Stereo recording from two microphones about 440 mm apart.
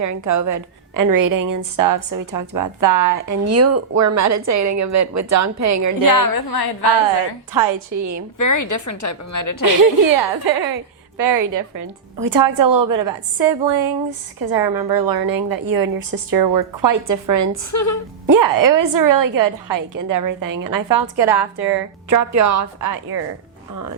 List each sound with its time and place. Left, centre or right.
0.0 s a woman's voice: right
6.0 s a woman's voice: left
7.5 s a woman's voice: right
8.4 s a woman's voice: left
9.6 s a woman's voice: right
11.2 s a woman's voice: right
13.7 s speech: right
14.6 s speech: centre
14.9 s a woman's voice: right
17.7 s a woman's voice: left
18.3 s a woman's voice: right